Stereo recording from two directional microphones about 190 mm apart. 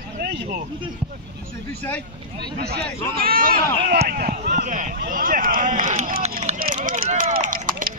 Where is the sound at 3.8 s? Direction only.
45° right (ahead or behind).